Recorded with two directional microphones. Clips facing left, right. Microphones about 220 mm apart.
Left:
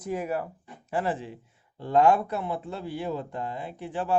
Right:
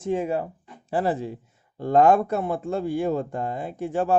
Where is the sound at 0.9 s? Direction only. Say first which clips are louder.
Right 5 dB; 35° right (ahead or behind).